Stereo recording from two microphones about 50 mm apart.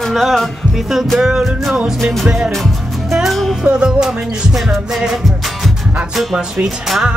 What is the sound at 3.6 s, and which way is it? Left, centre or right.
Music, right.